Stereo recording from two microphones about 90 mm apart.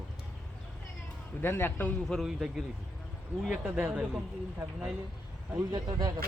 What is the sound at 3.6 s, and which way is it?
Speech, 15° right (ahead or behind).